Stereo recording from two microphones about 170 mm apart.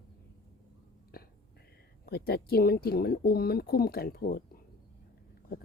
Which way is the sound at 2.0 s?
65° left (ahead or behind).